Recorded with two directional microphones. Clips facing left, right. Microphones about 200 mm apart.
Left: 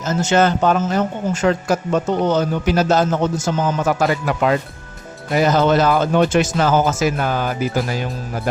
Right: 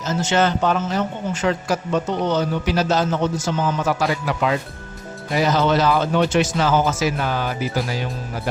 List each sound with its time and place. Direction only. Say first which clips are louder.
0.1 s a man's voice: left 3 dB; 45° left (ahead or behind)